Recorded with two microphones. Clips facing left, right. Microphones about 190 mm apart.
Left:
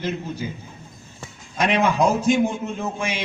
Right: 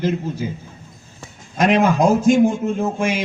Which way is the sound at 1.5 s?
45° right (ahead or behind).